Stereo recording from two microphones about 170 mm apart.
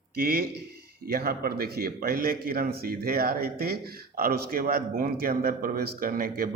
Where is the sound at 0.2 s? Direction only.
60° right (ahead or behind).